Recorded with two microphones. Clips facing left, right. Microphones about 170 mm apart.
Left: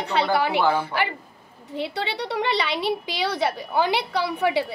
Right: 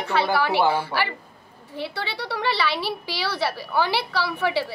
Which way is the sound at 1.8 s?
20° left (ahead or behind).